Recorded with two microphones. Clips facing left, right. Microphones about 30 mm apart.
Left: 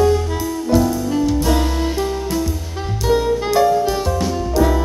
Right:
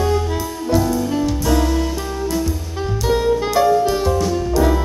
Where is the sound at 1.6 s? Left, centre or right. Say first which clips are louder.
Right 2 dB; centre.